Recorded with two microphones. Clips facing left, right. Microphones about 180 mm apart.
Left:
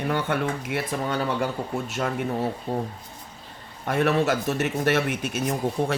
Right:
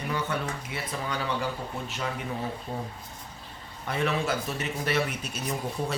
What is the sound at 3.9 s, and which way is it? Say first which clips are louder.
Speech: left 6 dB; 55° left (ahead or behind).